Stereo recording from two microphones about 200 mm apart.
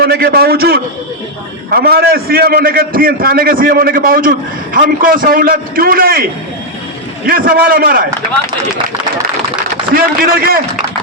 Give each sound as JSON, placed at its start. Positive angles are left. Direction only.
{"t": 0.0, "sound": "a man's voice", "side_deg": -50}
{"t": 7.3, "sound": "a man's voice", "side_deg": -45}
{"t": 9.9, "sound": "a man's voice", "side_deg": -45}